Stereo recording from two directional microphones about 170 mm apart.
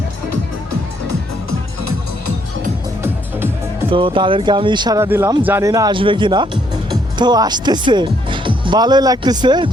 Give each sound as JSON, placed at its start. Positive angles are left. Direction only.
{"t": 3.0, "sound": "music", "side_deg": -15}
{"t": 3.8, "sound": "speech", "side_deg": -30}
{"t": 5.0, "sound": "speech", "side_deg": -15}